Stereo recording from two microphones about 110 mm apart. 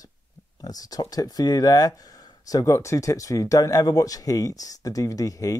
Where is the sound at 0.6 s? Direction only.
35° left (ahead or behind).